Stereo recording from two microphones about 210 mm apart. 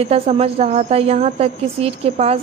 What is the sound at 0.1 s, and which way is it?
A woman's voice, 30° right (ahead or behind).